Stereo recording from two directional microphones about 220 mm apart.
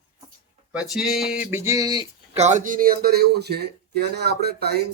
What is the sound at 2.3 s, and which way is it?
Speech, 30° right (ahead or behind).